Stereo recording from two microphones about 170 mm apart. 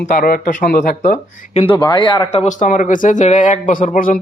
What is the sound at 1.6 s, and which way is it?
Speech, 25° left (ahead or behind).